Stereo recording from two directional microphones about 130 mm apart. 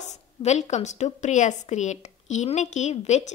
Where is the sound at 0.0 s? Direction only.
60° left (ahead or behind).